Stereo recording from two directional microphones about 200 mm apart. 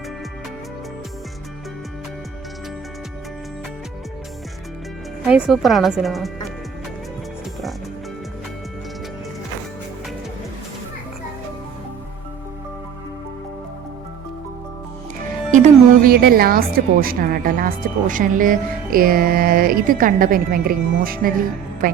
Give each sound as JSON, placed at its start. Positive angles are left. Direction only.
{"t": 5.2, "sound": "speech", "side_deg": -5}
{"t": 15.5, "sound": "a woman's voice", "side_deg": -40}